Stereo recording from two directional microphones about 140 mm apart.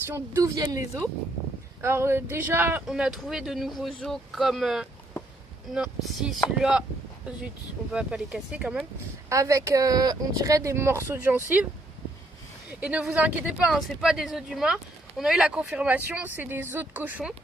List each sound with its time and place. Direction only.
0.1 s speech: 20° right (ahead or behind)
2.8 s speech: centre (ahead or behind)
7.9 s speech: 5° right (ahead or behind)
9.3 s speech: 20° right (ahead or behind)
12.8 s speech: 10° right (ahead or behind)